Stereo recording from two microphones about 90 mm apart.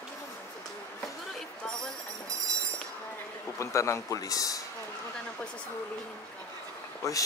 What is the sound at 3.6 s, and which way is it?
Speech, 35° left (ahead or behind).